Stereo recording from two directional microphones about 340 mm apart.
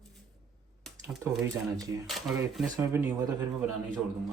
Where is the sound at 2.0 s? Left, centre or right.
Centre.